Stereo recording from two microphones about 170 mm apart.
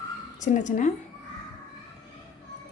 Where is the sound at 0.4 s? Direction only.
50° left (ahead or behind).